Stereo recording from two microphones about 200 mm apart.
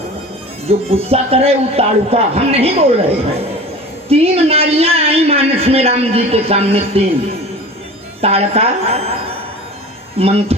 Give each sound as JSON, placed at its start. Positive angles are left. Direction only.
{"t": 0.7, "sound": "a man's voice", "side_deg": -30}
{"t": 4.1, "sound": "a man's voice", "side_deg": -30}
{"t": 8.2, "sound": "a man's voice", "side_deg": -30}